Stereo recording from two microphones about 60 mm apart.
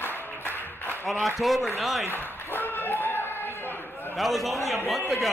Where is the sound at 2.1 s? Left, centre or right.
Left.